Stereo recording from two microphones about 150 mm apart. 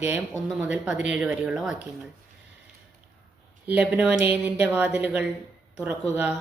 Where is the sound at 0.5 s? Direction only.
5° right (ahead or behind).